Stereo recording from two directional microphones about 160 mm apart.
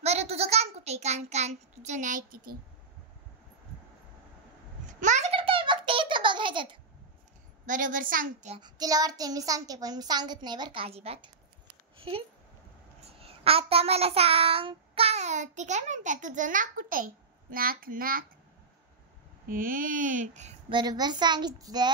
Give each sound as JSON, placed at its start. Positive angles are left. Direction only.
{"t": 0.0, "sound": "a child's voice", "side_deg": -40}
{"t": 4.8, "sound": "a sound", "side_deg": -50}
{"t": 5.3, "sound": "giggle", "side_deg": -35}
{"t": 7.6, "sound": "babbling", "side_deg": -55}
{"t": 8.5, "sound": "a child's voice", "side_deg": -25}
{"t": 13.0, "sound": "child singing", "side_deg": -40}
{"t": 19.5, "sound": "babbling", "side_deg": -60}
{"t": 20.7, "sound": "a child's voice", "side_deg": -25}